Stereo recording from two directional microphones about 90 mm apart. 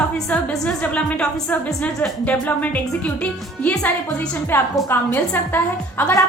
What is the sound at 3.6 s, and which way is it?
Speech, 15° left (ahead or behind).